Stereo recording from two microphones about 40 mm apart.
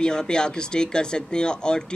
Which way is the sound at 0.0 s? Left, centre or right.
Centre.